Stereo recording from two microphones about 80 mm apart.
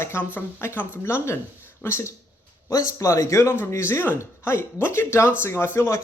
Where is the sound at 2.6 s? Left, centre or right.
Left.